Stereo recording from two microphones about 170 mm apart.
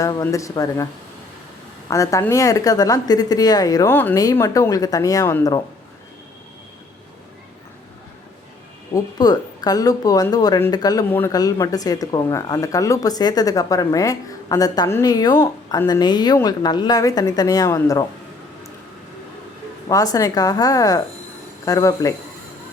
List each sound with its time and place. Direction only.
0.0 s speech: 20° left (ahead or behind)
1.9 s speech: 20° left (ahead or behind)
9.0 s speech: 25° left (ahead or behind)
19.9 s speech: 20° left (ahead or behind)